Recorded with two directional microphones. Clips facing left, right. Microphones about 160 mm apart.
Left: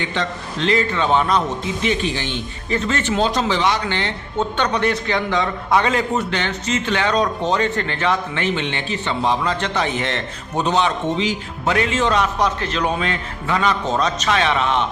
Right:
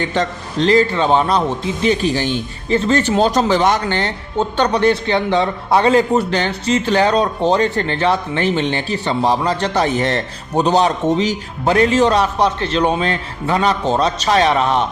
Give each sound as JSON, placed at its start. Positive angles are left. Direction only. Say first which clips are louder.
{"t": 0.0, "sound": "a man's voice", "louder": "right 5 dB", "side_deg": -40}